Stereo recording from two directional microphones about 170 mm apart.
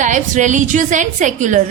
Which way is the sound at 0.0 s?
45° right (ahead or behind).